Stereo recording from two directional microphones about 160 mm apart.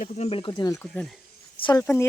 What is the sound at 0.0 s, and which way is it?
Speech, 40° left (ahead or behind).